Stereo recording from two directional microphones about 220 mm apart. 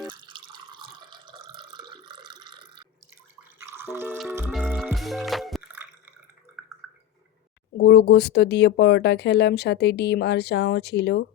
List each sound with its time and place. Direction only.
0.0 s drip: 20° right (ahead or behind)
3.7 s music: 10° right (ahead or behind)
7.8 s speech: 50° left (ahead or behind)